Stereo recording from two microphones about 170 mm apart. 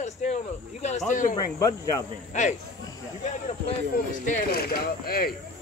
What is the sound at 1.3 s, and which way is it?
Speech, 20° left (ahead or behind).